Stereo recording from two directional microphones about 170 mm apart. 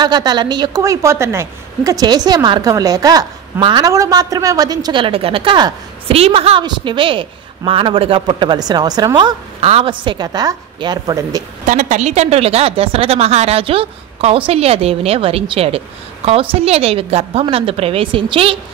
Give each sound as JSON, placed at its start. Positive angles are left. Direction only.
{"t": 0.0, "sound": "a woman's voice", "side_deg": -25}
{"t": 11.6, "sound": "a woman's voice", "side_deg": -50}